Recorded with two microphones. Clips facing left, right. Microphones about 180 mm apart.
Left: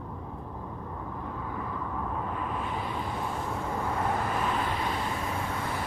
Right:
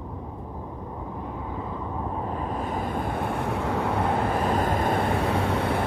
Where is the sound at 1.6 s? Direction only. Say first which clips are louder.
Right 2 dB; 25° right (ahead or behind); by 4.3 s 65° right (ahead or behind).